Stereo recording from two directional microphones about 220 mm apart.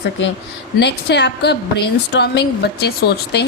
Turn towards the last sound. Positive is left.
turn(degrees=50)  # may be behind; listen again after turning